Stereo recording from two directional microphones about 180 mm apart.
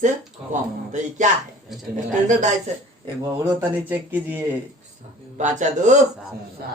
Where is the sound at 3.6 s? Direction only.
10° right (ahead or behind).